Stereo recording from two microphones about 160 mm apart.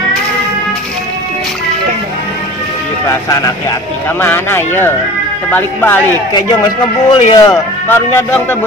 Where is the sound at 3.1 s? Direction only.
20° left (ahead or behind).